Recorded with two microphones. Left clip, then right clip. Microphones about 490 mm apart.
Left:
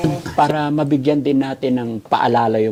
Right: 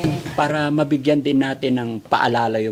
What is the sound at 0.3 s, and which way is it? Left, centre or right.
A man's voice, centre.